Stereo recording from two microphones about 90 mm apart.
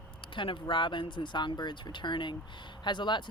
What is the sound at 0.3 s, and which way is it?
Speech, 70° left (ahead or behind).